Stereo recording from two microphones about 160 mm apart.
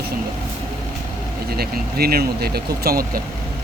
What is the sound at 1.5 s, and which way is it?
Speech, 75° right (ahead or behind).